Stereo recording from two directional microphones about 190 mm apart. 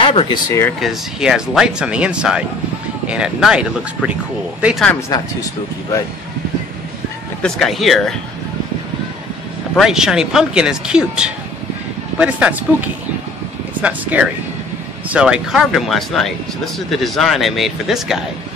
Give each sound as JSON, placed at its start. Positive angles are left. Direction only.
{"t": 0.0, "sound": "speech", "side_deg": 30}
{"t": 0.5, "sound": "speech", "side_deg": 15}
{"t": 0.7, "sound": "speech", "side_deg": 0}
{"t": 5.1, "sound": "speech", "side_deg": 20}
{"t": 7.4, "sound": "speech", "side_deg": 0}
{"t": 9.8, "sound": "speech", "side_deg": -5}